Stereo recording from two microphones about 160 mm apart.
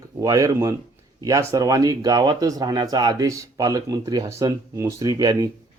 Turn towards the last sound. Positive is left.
turn(degrees=-25)  # may be behind; listen again after turning